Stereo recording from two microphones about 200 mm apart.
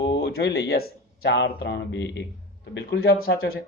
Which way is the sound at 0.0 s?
55° left (ahead or behind).